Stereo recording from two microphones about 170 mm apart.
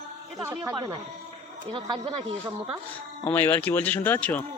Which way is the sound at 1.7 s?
30° right (ahead or behind).